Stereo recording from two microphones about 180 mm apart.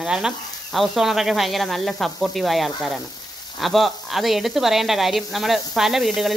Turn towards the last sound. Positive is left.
turn(degrees=0)  # may be behind; listen again after turning